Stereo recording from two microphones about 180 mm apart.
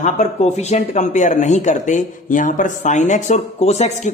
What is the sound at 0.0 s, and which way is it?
Speech, 40° left (ahead or behind).